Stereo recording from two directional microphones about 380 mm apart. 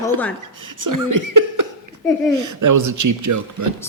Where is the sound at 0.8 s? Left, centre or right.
Right.